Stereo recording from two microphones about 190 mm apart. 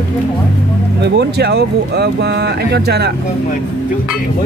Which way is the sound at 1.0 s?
60° right (ahead or behind).